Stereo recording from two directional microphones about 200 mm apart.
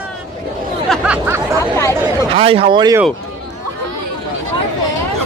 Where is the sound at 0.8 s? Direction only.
Centre (ahead or behind).